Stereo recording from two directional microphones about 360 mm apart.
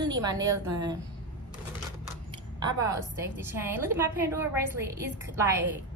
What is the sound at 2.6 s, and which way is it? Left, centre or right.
A woman's voice, centre.